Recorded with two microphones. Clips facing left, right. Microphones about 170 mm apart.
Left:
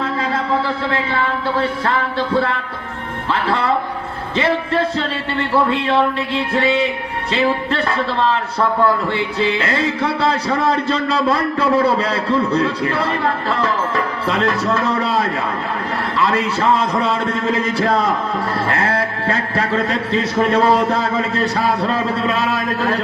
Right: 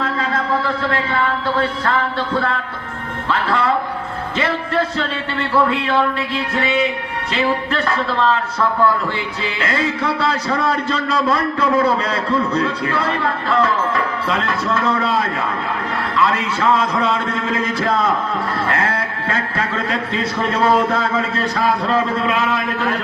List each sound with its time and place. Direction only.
0.3 s a man's voice: 30° left (ahead or behind)
5.8 s a man's voice: 30° left (ahead or behind)
9.4 s a man's voice: 35° left (ahead or behind)